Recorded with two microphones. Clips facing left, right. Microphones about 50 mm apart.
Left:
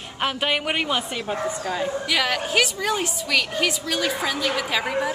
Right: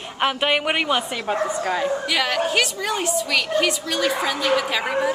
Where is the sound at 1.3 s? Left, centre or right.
Right.